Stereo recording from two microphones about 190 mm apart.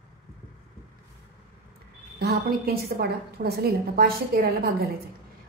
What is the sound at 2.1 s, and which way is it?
A woman's voice, 55° right (ahead or behind).